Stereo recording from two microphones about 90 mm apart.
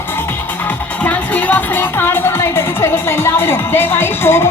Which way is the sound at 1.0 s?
15° left (ahead or behind).